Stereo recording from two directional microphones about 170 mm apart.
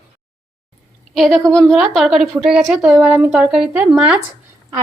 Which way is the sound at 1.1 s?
Centre (ahead or behind).